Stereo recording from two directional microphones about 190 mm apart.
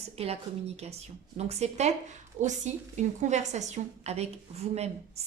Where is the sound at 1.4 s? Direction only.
35° right (ahead or behind).